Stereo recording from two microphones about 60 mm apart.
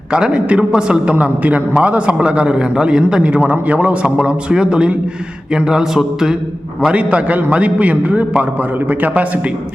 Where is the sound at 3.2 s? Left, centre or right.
Right.